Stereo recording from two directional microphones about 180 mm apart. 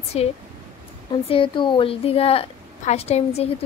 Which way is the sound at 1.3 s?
30° left (ahead or behind).